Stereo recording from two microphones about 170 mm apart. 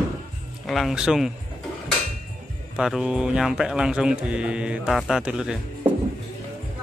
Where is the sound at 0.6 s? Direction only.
Centre (ahead or behind).